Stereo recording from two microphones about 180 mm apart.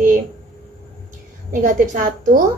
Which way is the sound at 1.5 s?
45° right (ahead or behind).